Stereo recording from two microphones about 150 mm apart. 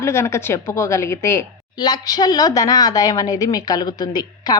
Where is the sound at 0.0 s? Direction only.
15° left (ahead or behind).